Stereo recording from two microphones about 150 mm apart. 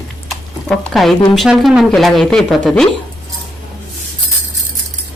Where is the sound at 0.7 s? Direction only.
Centre (ahead or behind).